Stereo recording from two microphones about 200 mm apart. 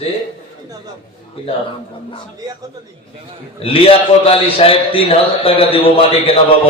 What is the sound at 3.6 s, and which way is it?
A man's voice, 30° left (ahead or behind).